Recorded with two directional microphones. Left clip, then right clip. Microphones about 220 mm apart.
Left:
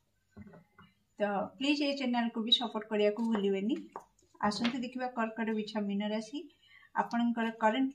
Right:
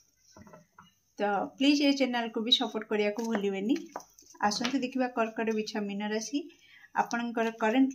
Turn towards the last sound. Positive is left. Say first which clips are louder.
# right 3 dB
turn(degrees=-40)  # may be behind; listen again after turning